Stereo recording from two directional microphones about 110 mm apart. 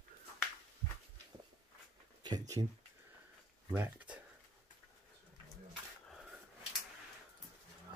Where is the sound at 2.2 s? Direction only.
35° right (ahead or behind).